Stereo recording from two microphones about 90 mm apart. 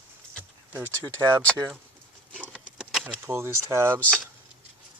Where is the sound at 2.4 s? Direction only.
10° right (ahead or behind).